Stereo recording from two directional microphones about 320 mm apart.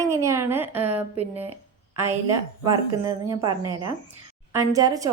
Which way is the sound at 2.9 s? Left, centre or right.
Centre.